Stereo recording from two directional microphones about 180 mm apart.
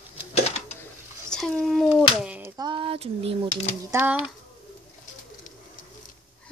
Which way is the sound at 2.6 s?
30° right (ahead or behind).